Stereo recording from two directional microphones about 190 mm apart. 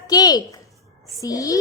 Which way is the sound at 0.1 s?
20° left (ahead or behind).